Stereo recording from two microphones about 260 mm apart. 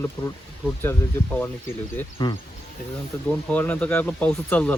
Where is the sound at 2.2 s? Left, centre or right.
Centre.